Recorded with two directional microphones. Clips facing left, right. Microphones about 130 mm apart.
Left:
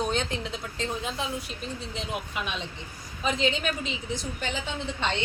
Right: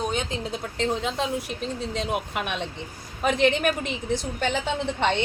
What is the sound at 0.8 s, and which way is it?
A woman's voice, 65° right (ahead or behind).